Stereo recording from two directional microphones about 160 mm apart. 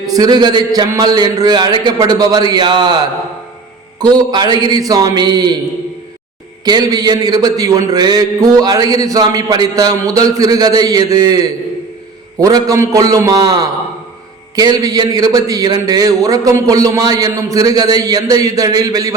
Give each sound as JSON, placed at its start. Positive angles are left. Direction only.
{"t": 0.1, "sound": "mantra", "side_deg": -25}
{"t": 4.0, "sound": "mantra", "side_deg": -25}
{"t": 6.7, "sound": "mantra", "side_deg": -25}